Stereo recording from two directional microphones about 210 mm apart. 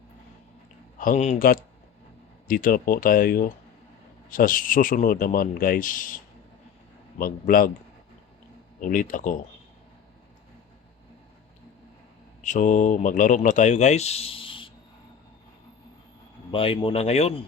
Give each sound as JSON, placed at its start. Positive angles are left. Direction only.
{"t": 0.9, "sound": "speech", "side_deg": 35}
{"t": 8.8, "sound": "speech", "side_deg": 40}
{"t": 12.4, "sound": "speech", "side_deg": 35}
{"t": 16.5, "sound": "a man's voice", "side_deg": 25}